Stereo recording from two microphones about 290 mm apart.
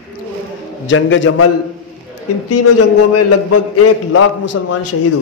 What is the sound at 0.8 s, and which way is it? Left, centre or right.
Speech, left.